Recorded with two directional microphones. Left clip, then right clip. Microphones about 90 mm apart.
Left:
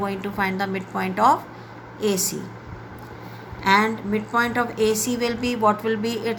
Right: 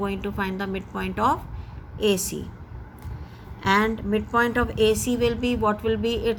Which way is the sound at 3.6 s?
45° right (ahead or behind).